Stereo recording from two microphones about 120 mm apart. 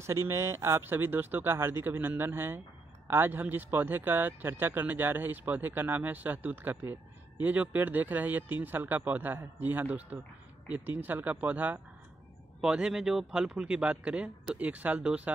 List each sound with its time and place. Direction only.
0.0 s speech: 25° right (ahead or behind)